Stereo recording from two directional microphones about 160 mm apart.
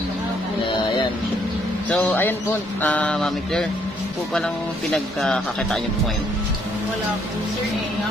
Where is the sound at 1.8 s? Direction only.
10° left (ahead or behind).